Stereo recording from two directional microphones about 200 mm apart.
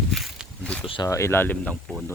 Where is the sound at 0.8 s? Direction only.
25° left (ahead or behind).